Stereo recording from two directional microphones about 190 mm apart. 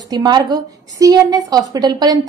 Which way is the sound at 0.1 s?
20° right (ahead or behind).